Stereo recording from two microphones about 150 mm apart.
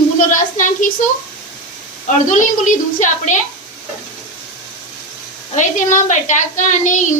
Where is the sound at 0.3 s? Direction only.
60° left (ahead or behind).